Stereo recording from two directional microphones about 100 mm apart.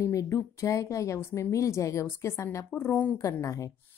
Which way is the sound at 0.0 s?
30° left (ahead or behind).